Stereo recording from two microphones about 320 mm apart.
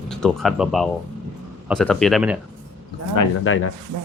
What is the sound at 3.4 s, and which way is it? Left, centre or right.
Speech, left.